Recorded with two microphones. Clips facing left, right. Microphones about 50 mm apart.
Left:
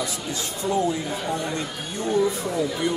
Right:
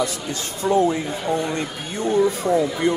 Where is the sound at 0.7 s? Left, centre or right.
Right.